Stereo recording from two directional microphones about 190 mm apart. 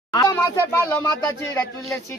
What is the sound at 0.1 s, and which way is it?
Speech, 15° left (ahead or behind).